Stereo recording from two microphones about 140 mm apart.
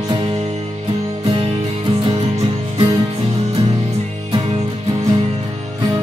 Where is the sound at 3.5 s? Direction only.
30° right (ahead or behind).